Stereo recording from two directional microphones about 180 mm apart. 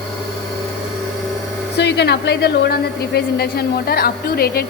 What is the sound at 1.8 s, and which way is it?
A woman's voice, 70° left (ahead or behind).